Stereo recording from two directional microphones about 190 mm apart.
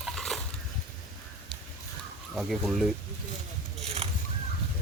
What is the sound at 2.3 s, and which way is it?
Speech, centre (ahead or behind).